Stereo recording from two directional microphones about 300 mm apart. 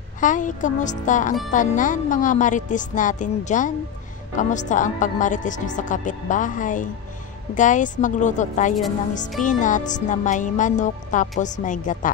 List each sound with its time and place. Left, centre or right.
0.2 s speech: left